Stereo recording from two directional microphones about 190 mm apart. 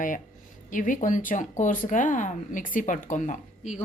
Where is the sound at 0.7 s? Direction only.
45° left (ahead or behind).